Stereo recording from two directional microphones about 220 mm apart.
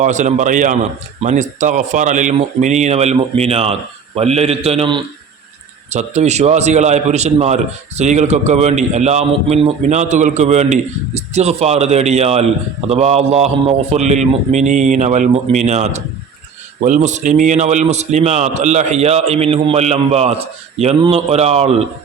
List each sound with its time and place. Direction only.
0.0 s a man's voice: 35° right (ahead or behind)